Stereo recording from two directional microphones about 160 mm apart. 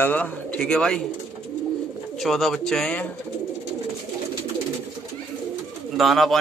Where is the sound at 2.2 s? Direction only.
Centre (ahead or behind).